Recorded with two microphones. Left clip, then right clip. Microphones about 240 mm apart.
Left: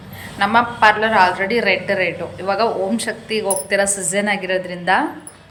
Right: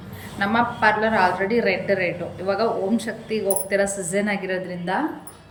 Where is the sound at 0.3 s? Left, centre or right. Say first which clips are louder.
Left 6 dB; centre.